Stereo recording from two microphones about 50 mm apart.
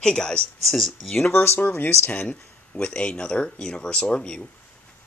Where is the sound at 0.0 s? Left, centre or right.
Centre.